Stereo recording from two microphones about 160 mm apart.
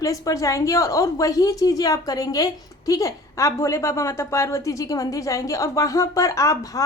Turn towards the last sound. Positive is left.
turn(degrees=20)  # may be behind; listen again after turning